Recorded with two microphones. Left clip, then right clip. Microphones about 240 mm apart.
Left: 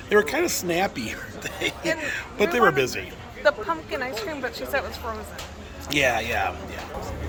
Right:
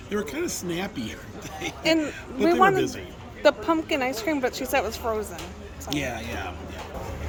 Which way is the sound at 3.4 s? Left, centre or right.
Right.